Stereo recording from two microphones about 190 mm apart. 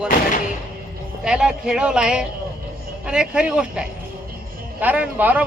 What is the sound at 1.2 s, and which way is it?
A man's voice, 5° right (ahead or behind).